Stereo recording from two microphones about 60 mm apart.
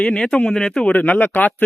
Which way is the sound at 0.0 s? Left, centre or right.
Centre.